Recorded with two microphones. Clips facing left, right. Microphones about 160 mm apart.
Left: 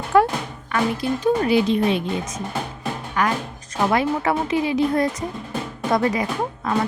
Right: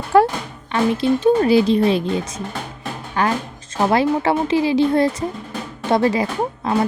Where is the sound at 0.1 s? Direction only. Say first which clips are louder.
Right 3 dB; 35° right (ahead or behind).